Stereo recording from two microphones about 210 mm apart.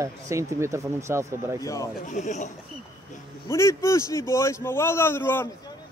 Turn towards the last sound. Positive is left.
turn(degrees=10)  # may be behind; listen again after turning